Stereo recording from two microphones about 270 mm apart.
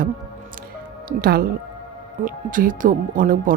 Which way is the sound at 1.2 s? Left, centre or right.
Right.